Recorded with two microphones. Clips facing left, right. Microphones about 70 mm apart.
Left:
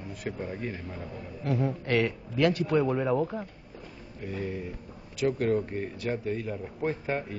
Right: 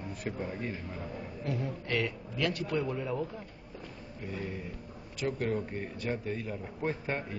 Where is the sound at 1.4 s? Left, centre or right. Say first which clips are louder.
Left 7 dB; left.